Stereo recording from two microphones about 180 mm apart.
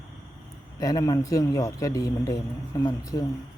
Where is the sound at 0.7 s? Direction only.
20° left (ahead or behind).